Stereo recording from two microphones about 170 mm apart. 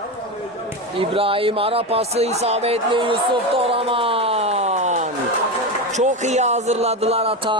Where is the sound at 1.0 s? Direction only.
35° right (ahead or behind).